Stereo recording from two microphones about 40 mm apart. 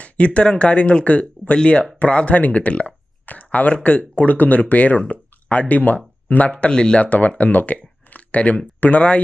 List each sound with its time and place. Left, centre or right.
0.0 s speech: left
6.5 s speech: left
7.0 s speech: left